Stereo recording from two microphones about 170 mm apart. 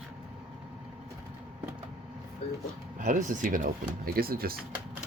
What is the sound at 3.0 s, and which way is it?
Speech, 50° right (ahead or behind).